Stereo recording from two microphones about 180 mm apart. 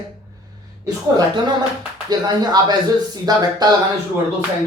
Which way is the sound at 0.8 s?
20° right (ahead or behind).